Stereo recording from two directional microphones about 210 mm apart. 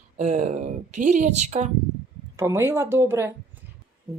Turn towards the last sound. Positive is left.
turn(degrees=-10)  # may be behind; listen again after turning